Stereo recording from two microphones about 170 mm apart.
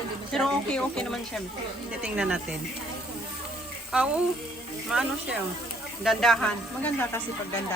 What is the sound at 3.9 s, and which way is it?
A woman's voice, 5° right (ahead or behind).